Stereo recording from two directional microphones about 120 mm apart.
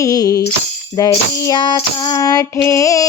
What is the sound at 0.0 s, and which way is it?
Music, 30° left (ahead or behind).